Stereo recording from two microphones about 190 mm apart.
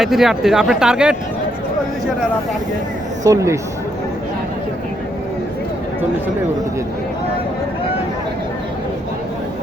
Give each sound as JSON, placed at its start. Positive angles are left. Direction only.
{"t": 0.0, "sound": "speech", "side_deg": 0}
{"t": 3.2, "sound": "speech", "side_deg": -15}